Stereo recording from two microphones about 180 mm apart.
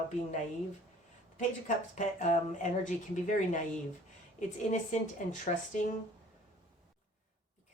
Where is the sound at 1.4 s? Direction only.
40° left (ahead or behind).